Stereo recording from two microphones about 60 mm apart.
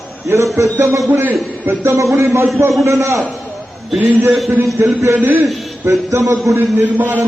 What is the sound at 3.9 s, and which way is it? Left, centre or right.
Speech, right.